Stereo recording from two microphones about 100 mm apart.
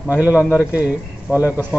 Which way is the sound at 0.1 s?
15° right (ahead or behind).